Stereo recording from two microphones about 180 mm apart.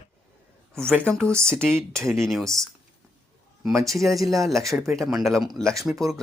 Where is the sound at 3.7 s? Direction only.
15° right (ahead or behind).